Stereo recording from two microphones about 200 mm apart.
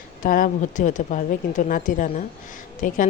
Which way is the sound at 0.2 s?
45° left (ahead or behind).